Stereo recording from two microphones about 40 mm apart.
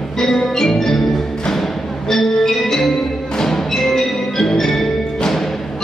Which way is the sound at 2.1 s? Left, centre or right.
Centre.